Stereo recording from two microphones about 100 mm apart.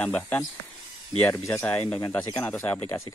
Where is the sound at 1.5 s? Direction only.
20° left (ahead or behind).